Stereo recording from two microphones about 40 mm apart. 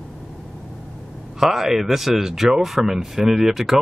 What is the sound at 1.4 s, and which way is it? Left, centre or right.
Speech, centre.